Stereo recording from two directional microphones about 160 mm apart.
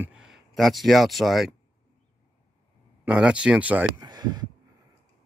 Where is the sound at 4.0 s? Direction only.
25° right (ahead or behind).